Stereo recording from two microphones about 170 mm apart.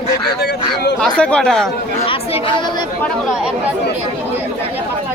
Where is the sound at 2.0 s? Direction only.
30° left (ahead or behind).